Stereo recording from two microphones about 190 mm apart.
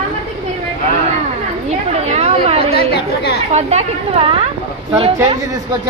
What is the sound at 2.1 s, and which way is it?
Speech, 35° right (ahead or behind).